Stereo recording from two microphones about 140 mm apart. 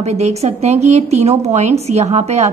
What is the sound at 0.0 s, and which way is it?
A woman's voice, 50° right (ahead or behind).